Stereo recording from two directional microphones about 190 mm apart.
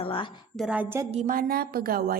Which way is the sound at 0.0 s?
30° left (ahead or behind).